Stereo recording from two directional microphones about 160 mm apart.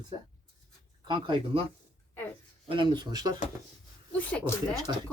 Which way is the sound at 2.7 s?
30° right (ahead or behind).